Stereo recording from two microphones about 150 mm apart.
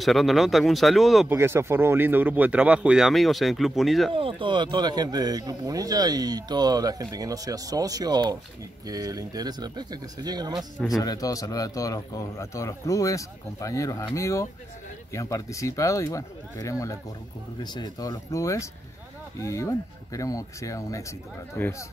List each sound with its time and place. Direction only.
0.0 s speech: centre (ahead or behind)
1.3 s speech: 15° right (ahead or behind); by 4.1 s centre (ahead or behind)
4.1 s speech: 35° right (ahead or behind)
11.0 s a man's voice: 25° left (ahead or behind)